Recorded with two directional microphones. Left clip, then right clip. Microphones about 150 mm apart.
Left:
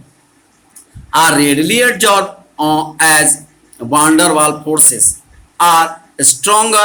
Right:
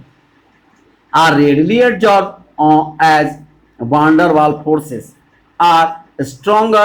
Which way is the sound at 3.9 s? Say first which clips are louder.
Even; 30° right (ahead or behind).